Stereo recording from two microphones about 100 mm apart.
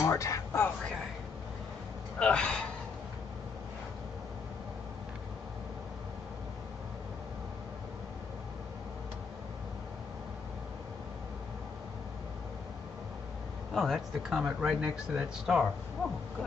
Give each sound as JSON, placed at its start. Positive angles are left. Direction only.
{"t": 0.0, "sound": "speech", "side_deg": 30}
{"t": 2.1, "sound": "speech", "side_deg": 10}
{"t": 13.7, "sound": "speech", "side_deg": 0}